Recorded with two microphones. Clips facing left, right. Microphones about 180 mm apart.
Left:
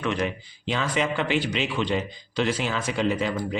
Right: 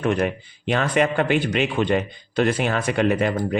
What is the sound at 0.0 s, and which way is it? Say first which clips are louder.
A man's voice: right 5 dB; 55° right (ahead or behind).